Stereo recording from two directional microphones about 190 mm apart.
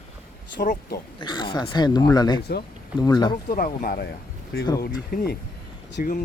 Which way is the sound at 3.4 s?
45° left (ahead or behind).